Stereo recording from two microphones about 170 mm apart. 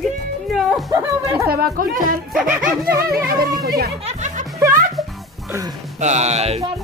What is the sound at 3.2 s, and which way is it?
Speech, 60° right (ahead or behind).